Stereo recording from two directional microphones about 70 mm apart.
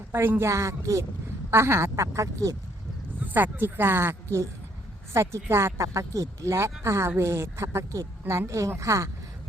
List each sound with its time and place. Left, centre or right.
0.1 s speech: right
3.2 s speech: right